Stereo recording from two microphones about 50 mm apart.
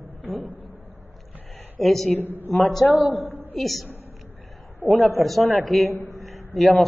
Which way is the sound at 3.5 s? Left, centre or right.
Centre.